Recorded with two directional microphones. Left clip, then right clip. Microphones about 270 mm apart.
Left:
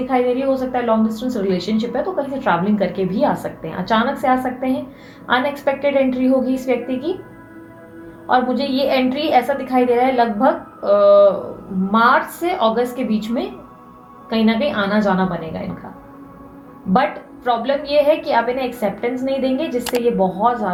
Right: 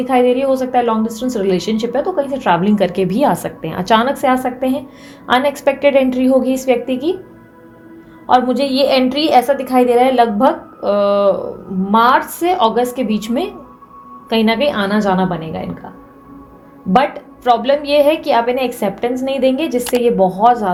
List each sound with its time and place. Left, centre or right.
0.1 s a woman's voice: right
8.3 s a woman's voice: right
16.9 s a woman's voice: right